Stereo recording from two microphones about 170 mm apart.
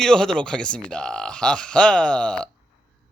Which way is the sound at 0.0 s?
5° left (ahead or behind).